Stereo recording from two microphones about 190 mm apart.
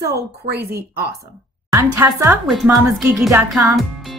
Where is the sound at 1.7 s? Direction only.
15° right (ahead or behind).